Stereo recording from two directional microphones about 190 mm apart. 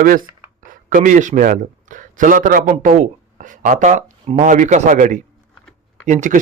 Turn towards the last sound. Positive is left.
turn(degrees=-40)  # may be behind; listen again after turning